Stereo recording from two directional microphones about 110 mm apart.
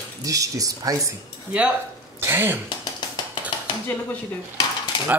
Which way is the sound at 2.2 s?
20° right (ahead or behind).